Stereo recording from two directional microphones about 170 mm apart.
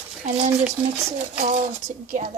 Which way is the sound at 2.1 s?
45° right (ahead or behind).